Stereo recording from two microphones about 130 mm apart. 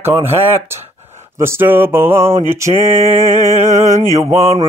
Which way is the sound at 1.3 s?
20° right (ahead or behind).